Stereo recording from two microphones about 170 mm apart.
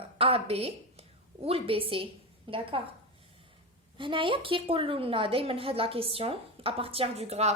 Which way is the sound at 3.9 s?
30° right (ahead or behind).